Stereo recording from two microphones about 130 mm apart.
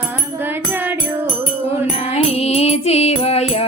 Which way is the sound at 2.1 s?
55° left (ahead or behind).